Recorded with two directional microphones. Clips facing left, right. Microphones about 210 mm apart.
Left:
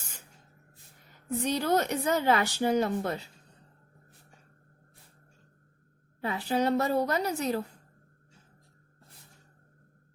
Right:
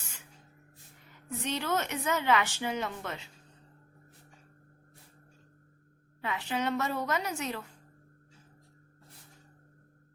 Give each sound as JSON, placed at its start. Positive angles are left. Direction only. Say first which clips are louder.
{"t": 1.5, "sound": "speech", "louder": "left 5 dB", "side_deg": 35}
{"t": 6.2, "sound": "speech", "louder": "left 5 dB", "side_deg": 35}